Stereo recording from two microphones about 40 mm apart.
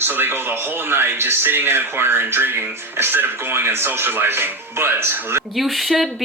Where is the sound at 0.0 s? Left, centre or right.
Right.